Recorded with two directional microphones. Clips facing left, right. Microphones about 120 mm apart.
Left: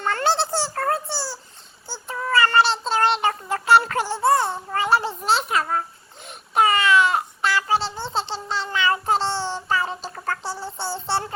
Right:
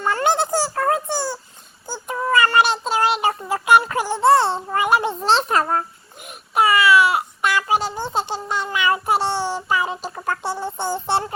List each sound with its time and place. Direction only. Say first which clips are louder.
0.0 s a child's voice: right 2 dB; 15° right (ahead or behind)
2.0 s child singing: right 2 dB; 20° right (ahead or behind)
4.2 s a sound: right 5 dB; 30° right (ahead or behind)
5.2 s a child's voice: right 4 dB; 35° right (ahead or behind)
6.2 s babbling: right 1 dB; 10° right (ahead or behind)
8.3 s child singing: right 3 dB; 15° right (ahead or behind)
10.2 s a sound: right 4 dB; 20° right (ahead or behind)